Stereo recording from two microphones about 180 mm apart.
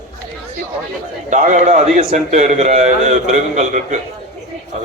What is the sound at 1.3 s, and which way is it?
A man's voice, 45° right (ahead or behind).